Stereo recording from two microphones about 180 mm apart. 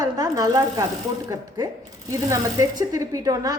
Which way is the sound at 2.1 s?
20° right (ahead or behind).